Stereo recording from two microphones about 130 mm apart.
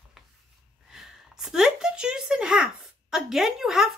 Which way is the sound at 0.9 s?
Centre (ahead or behind).